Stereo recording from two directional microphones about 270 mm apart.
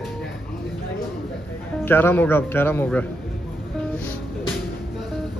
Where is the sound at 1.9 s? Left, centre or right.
Centre.